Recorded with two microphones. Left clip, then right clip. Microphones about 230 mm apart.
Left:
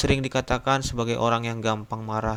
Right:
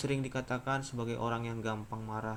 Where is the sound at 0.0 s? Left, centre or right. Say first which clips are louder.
Left 12 dB; left.